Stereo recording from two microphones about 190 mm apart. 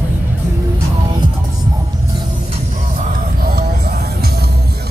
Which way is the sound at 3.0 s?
55° right (ahead or behind).